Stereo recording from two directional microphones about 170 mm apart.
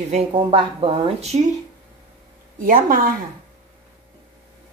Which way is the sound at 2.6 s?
55° right (ahead or behind).